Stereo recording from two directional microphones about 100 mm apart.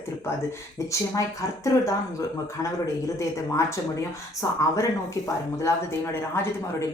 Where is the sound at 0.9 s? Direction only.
35° left (ahead or behind).